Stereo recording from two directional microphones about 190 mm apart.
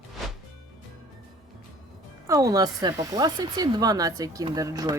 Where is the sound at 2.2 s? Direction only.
20° right (ahead or behind).